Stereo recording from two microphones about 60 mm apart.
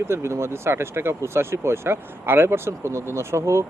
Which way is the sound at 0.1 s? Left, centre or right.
Right.